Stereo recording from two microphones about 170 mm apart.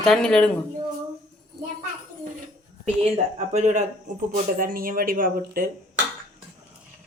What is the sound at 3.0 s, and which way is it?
Speech, 40° right (ahead or behind).